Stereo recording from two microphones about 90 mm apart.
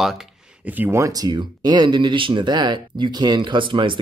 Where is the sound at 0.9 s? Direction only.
35° right (ahead or behind).